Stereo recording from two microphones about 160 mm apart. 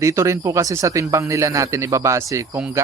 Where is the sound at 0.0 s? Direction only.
20° right (ahead or behind).